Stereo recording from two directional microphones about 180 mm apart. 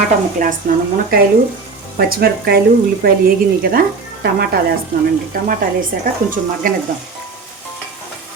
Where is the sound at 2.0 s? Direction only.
55° right (ahead or behind).